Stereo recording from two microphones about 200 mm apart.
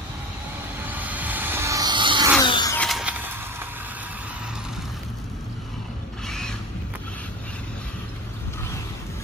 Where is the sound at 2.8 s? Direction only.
Centre (ahead or behind).